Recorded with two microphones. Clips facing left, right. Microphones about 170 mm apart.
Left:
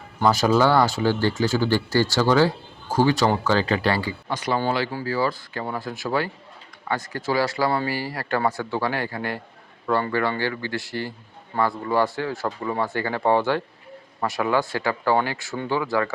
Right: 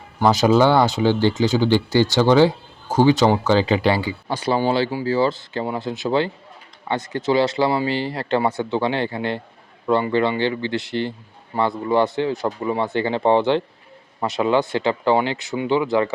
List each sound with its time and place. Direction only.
0.2 s speech: 20° right (ahead or behind)